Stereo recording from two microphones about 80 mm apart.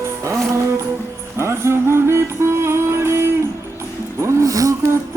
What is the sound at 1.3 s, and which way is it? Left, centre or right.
Music, right.